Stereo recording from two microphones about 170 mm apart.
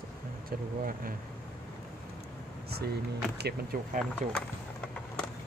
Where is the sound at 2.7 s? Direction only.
70° right (ahead or behind).